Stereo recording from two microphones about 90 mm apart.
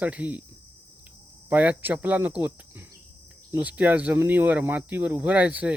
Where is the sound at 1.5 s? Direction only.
15° right (ahead or behind).